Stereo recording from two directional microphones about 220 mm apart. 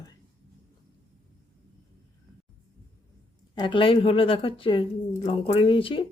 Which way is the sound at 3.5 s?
20° left (ahead or behind).